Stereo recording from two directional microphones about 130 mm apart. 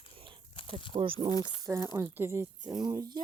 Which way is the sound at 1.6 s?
25° right (ahead or behind).